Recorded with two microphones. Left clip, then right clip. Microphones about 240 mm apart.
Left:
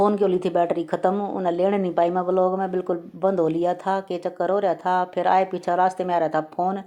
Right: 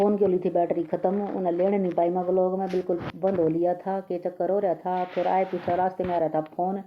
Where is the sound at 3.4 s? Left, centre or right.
Centre.